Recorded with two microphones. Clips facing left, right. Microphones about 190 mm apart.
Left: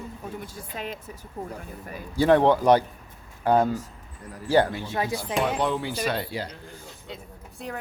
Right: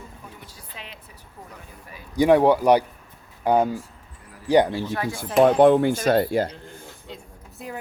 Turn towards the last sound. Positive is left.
turn(degrees=-5)  # may be behind; listen again after turning